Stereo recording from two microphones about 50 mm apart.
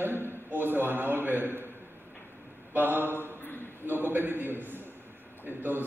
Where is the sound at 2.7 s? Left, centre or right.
Right.